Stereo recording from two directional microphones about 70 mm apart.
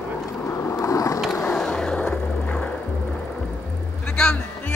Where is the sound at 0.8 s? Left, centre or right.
Left.